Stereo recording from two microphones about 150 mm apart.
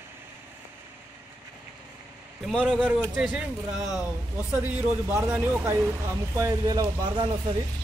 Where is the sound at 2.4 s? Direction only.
Centre (ahead or behind).